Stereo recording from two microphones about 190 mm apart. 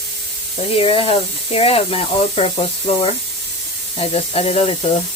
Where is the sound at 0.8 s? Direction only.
30° left (ahead or behind).